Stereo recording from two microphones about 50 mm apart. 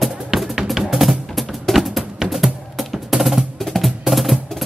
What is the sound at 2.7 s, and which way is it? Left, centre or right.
Music, centre.